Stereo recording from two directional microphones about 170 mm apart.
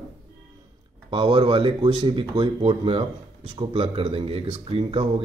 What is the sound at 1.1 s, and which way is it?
Speech, 30° right (ahead or behind).